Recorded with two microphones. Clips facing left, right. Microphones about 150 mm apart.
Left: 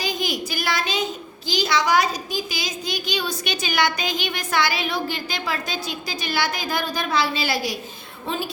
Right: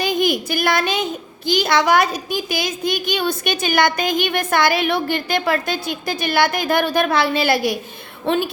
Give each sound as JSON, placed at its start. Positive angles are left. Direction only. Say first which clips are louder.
{"t": 0.0, "sound": "a sound", "louder": "right 7 dB", "side_deg": -55}
{"t": 1.5, "sound": "a child's voice", "louder": "right 5 dB", "side_deg": -55}
{"t": 8.3, "sound": "a woman's voice", "louder": "right 9 dB", "side_deg": -65}